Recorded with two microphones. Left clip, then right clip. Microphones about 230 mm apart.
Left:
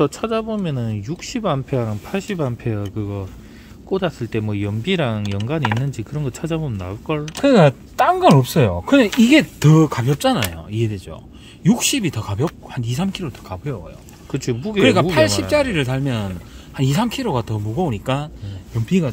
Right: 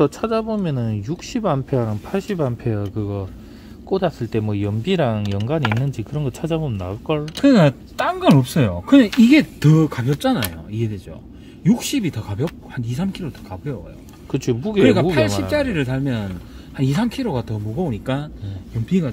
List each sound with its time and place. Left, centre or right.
0.0 s speech: centre
7.4 s speech: left
14.3 s speech: centre
14.8 s speech: left